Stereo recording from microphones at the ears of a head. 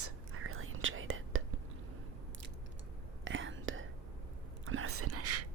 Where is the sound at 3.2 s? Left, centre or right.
Right.